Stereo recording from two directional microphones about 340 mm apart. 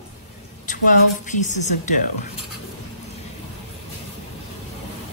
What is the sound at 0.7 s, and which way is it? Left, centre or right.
A woman's voice, left.